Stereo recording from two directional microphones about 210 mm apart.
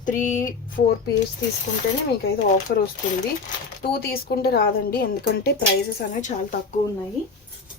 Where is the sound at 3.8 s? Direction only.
45° left (ahead or behind).